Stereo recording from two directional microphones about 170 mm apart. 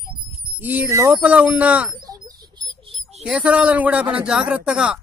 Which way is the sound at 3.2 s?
5° right (ahead or behind).